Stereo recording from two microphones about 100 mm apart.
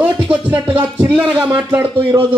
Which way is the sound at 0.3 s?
15° right (ahead or behind).